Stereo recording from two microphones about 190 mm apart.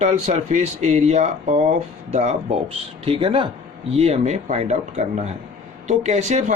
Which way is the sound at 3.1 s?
30° right (ahead or behind).